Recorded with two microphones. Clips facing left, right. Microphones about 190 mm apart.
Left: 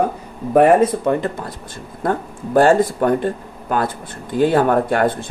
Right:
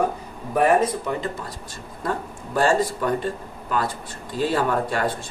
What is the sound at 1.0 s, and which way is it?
Speech, 55° left (ahead or behind).